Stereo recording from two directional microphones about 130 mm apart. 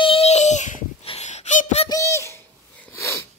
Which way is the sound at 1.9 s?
20° left (ahead or behind).